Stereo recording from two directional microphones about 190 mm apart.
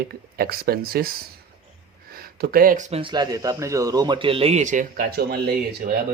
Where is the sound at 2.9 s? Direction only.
30° right (ahead or behind).